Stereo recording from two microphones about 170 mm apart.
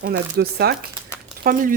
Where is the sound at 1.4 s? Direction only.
55° right (ahead or behind).